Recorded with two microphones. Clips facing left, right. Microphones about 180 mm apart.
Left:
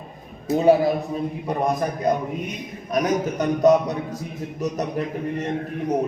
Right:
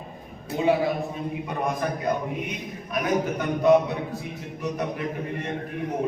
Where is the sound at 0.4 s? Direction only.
40° left (ahead or behind).